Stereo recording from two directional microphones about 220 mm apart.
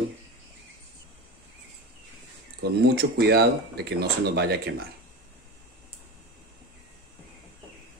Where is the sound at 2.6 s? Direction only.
45° right (ahead or behind).